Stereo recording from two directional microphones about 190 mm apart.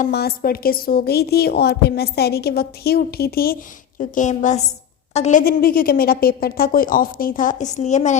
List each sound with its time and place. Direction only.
0.1 s a woman's voice: 55° left (ahead or behind)
4.1 s a woman's voice: 40° left (ahead or behind)
5.5 s a woman's voice: 50° left (ahead or behind)